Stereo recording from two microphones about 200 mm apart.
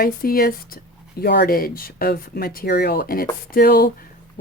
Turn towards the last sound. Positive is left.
turn(degrees=50)  # may be behind; listen again after turning